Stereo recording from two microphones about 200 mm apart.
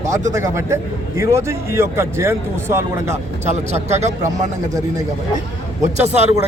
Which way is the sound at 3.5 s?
35° right (ahead or behind).